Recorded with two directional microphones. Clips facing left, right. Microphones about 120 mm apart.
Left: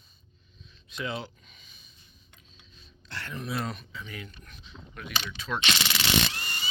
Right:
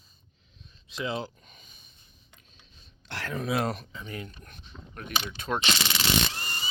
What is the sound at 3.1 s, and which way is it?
Speech, 90° right.